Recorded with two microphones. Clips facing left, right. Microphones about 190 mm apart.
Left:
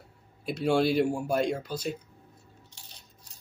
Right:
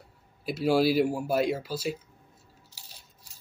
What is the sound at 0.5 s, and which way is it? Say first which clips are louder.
Speech: right 1 dB; 5° right (ahead or behind).